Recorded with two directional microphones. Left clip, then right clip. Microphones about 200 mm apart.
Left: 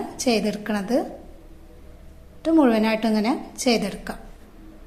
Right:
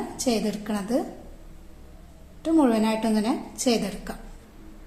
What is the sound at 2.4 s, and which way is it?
A woman's voice, 25° left (ahead or behind).